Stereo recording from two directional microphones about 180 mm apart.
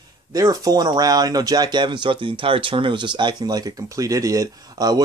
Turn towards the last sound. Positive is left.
turn(degrees=-20)  # may be behind; listen again after turning